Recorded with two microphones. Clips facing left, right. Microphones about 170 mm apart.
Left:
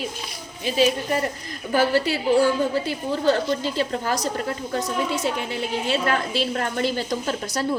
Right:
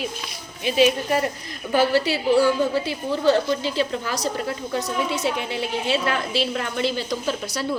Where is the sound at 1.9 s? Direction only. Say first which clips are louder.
Right 1 dB; 45° left (ahead or behind).